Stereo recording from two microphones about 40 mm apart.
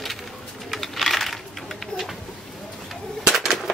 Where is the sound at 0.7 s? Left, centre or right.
Centre.